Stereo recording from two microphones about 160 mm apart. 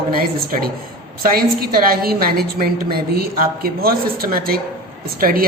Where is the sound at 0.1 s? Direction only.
65° right (ahead or behind).